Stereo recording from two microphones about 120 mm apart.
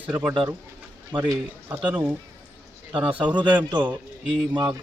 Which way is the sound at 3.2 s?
40° right (ahead or behind).